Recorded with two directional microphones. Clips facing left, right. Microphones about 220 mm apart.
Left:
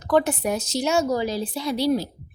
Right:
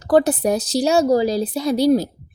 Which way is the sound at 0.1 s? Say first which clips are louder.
Right 5 dB; 35° right (ahead or behind).